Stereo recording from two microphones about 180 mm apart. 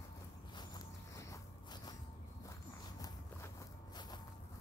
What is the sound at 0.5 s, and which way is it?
Walk, 20° left (ahead or behind).